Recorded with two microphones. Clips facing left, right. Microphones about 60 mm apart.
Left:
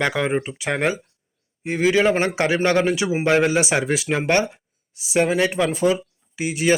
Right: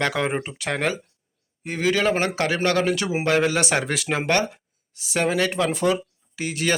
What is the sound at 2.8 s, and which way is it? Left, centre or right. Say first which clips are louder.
Speech: left 3 dB; centre.